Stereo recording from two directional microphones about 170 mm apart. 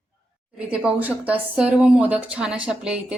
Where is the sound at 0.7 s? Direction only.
10° right (ahead or behind).